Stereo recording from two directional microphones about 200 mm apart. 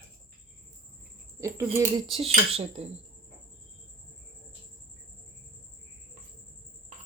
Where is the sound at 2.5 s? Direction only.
30° right (ahead or behind).